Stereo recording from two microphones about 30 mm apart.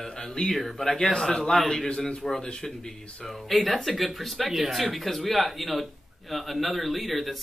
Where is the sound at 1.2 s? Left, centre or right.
Centre.